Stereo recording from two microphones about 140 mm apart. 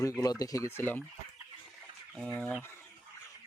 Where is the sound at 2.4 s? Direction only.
10° left (ahead or behind).